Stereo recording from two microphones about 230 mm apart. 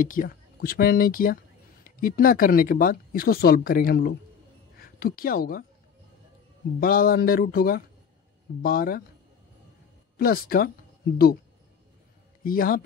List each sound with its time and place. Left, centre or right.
0.0 s speech: left
6.8 s speech: left
10.1 s speech: left
12.4 s speech: left